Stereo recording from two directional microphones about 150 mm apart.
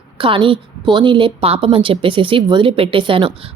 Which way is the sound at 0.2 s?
35° right (ahead or behind).